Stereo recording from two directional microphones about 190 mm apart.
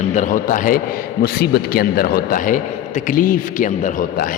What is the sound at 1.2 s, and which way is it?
A man's voice, 55° left (ahead or behind).